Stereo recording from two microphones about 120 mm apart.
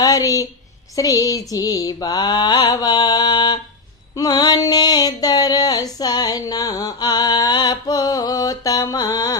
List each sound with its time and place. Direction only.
0.0 s a woman's voice: 30° left (ahead or behind)
0.9 s mantra: 30° left (ahead or behind)
4.2 s a sound: 35° left (ahead or behind)